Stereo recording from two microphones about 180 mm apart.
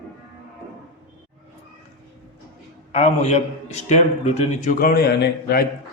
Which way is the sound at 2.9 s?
40° left (ahead or behind).